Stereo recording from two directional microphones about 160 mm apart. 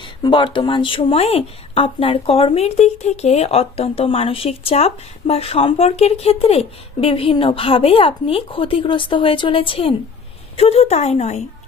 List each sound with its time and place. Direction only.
0.0 s speech: 30° left (ahead or behind)